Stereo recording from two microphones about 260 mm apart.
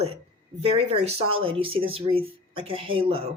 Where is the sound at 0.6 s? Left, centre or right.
Right.